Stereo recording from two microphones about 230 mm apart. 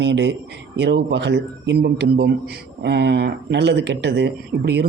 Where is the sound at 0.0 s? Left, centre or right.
Right.